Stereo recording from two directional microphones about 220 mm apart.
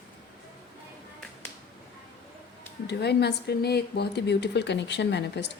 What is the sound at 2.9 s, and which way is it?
Speech, 50° left (ahead or behind).